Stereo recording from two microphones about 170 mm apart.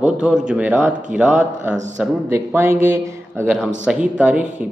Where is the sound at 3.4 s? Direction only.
5° right (ahead or behind).